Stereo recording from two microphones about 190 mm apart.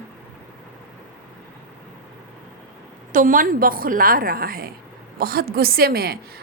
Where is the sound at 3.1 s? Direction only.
45° right (ahead or behind).